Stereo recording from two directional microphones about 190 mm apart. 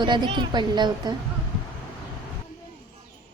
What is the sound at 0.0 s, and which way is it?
A woman's voice, 25° right (ahead or behind).